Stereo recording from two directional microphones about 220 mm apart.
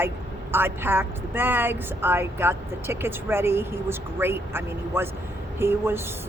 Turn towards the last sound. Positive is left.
turn(degrees=-10)  # may be behind; listen again after turning